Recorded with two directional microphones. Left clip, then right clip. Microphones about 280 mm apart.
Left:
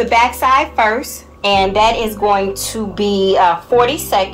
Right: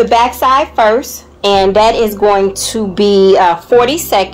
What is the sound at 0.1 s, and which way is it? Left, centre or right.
A woman's voice, right.